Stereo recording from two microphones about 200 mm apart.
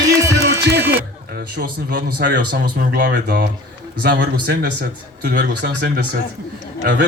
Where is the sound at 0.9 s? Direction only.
45° right (ahead or behind).